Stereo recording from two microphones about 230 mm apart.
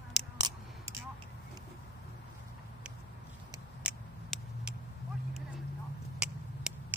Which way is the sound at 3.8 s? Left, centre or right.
Centre.